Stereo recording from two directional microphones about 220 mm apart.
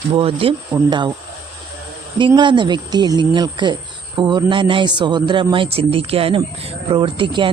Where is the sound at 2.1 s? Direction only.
20° right (ahead or behind).